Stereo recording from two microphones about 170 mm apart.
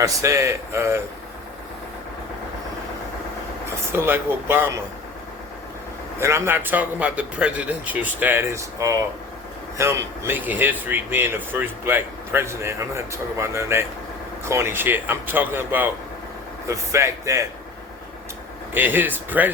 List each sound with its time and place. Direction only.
0.0 s speech: 20° right (ahead or behind)
3.9 s speech: 10° right (ahead or behind)
6.1 s speech: 15° right (ahead or behind)
18.7 s speech: 10° right (ahead or behind)